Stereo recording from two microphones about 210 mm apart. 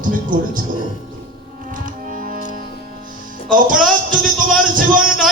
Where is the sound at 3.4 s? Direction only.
40° right (ahead or behind).